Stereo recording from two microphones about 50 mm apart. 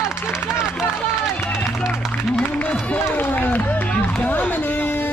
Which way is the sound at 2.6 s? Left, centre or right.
Left.